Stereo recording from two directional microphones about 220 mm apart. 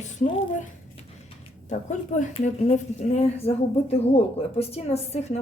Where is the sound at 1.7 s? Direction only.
35° left (ahead or behind).